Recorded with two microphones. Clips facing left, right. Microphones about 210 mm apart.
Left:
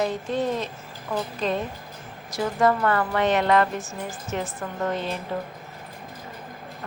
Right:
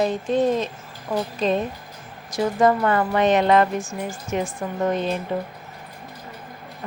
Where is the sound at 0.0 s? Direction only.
20° right (ahead or behind).